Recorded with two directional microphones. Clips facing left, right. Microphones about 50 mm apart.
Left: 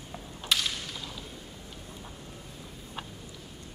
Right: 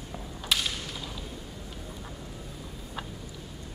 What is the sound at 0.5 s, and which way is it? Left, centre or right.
Whip, centre.